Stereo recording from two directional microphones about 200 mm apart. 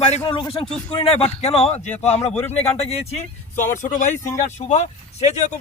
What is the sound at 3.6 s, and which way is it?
Speech, 35° left (ahead or behind).